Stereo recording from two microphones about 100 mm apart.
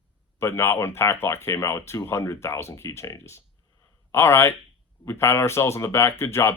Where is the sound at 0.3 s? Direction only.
25° left (ahead or behind).